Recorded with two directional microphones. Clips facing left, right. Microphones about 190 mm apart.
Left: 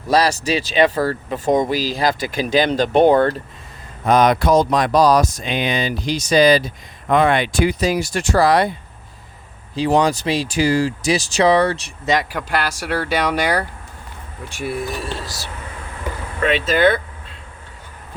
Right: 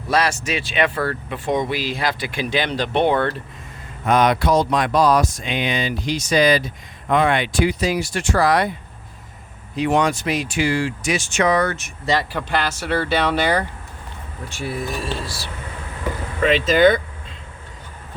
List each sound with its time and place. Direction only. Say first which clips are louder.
0.1 s speech: left 4 dB; 35° left (ahead or behind)
9.7 s speech: left 2 dB; 35° left (ahead or behind)
12.0 s speech: left 2 dB; 15° left (ahead or behind)
16.4 s speech: right 1 dB; centre (ahead or behind)